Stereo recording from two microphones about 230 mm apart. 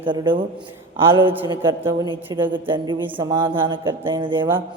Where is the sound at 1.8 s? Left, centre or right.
Centre.